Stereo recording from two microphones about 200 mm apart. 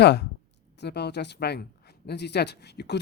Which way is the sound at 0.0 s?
55° left (ahead or behind).